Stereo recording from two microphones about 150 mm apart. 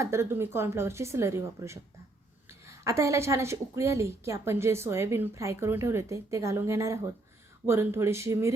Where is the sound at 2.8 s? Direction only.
20° right (ahead or behind).